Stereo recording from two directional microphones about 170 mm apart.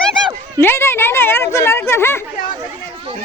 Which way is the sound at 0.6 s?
15° left (ahead or behind).